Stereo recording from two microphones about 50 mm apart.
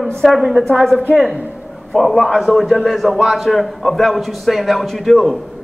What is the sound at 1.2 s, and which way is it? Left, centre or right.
A man's voice, centre.